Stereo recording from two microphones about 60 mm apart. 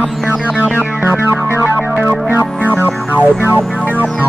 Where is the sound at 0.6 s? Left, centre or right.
Right.